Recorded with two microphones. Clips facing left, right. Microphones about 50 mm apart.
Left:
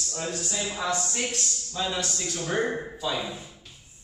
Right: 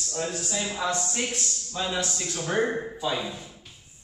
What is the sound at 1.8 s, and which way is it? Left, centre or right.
A man's voice, centre.